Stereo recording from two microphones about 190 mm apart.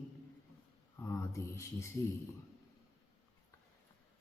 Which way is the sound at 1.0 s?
15° left (ahead or behind).